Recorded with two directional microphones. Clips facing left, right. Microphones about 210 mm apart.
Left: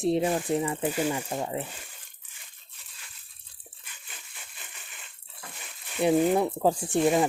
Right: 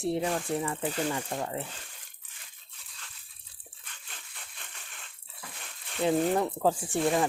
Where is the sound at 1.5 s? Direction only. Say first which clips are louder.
Left 3 dB; 15° left (ahead or behind).